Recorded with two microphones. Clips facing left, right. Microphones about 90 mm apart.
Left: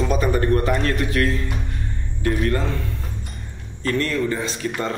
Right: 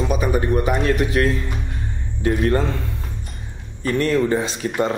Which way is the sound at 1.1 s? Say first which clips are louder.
Right 1 dB; 20° right (ahead or behind).